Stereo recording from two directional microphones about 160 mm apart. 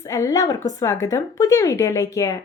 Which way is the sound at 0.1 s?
20° left (ahead or behind).